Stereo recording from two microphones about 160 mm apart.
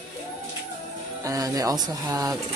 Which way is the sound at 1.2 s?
20° right (ahead or behind).